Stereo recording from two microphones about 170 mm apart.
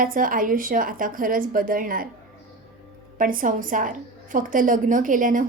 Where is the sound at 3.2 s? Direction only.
55° right (ahead or behind).